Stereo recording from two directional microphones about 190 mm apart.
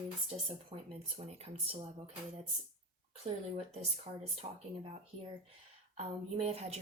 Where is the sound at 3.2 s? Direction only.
35° right (ahead or behind).